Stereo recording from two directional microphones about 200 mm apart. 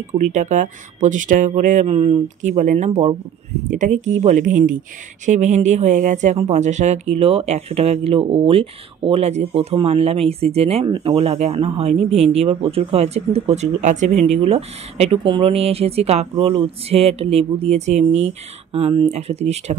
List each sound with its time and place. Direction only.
0.2 s speech: 35° right (ahead or behind)